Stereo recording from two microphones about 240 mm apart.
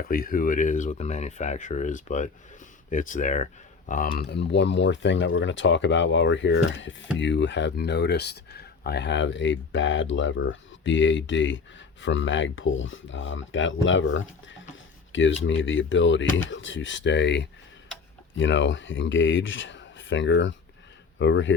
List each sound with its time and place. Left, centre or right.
0.0 s speech: left